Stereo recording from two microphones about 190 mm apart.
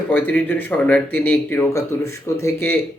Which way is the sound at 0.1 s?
10° left (ahead or behind).